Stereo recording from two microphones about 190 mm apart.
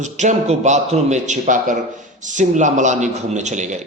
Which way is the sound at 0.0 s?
40° right (ahead or behind).